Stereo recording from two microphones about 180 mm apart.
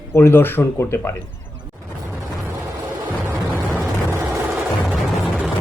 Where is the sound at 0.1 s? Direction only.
15° left (ahead or behind).